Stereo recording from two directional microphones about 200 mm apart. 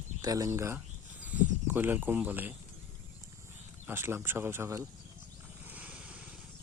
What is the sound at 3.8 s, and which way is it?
Speech, 10° right (ahead or behind).